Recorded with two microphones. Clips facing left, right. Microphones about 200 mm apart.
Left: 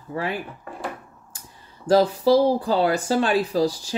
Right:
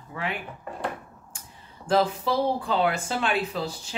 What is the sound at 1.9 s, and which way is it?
Speech, 35° left (ahead or behind).